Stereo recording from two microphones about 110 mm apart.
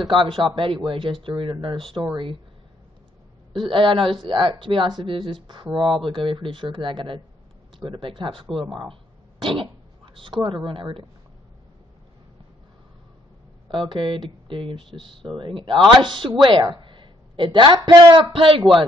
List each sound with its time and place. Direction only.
0.1 s speech: 50° right (ahead or behind)
3.5 s speech: 50° right (ahead or behind)
13.8 s speech: 50° right (ahead or behind)
16.7 s a sound: 50° right (ahead or behind)
17.8 s speech: 45° right (ahead or behind)